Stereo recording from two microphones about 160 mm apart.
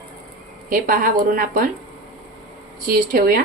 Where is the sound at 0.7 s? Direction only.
60° right (ahead or behind).